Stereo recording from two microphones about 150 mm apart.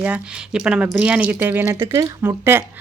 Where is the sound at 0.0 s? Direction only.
5° right (ahead or behind).